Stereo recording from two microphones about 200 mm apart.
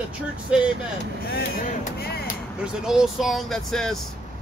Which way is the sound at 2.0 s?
50° left (ahead or behind).